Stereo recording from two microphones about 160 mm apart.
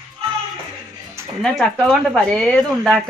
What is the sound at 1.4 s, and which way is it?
Speech, 5° left (ahead or behind).